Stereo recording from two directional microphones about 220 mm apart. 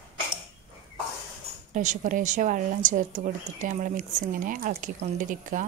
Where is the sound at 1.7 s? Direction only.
35° right (ahead or behind).